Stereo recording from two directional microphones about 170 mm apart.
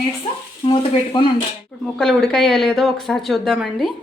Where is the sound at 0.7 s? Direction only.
25° left (ahead or behind).